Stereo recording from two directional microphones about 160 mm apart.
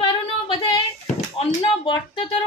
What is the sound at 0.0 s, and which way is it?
Child singing, 35° left (ahead or behind).